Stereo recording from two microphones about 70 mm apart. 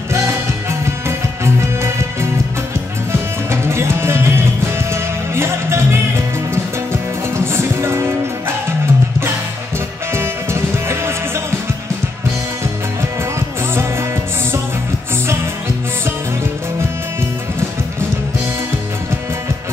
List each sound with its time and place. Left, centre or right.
0.7 s music: right
10.1 s music: right